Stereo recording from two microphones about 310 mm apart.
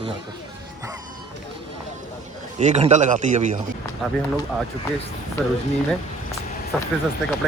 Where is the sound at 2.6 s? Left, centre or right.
Right.